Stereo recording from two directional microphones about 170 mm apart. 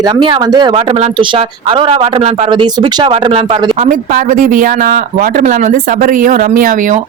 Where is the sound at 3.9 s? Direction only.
55° right (ahead or behind).